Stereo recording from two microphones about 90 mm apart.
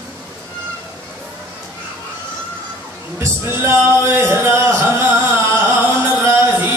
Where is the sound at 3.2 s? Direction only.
30° right (ahead or behind).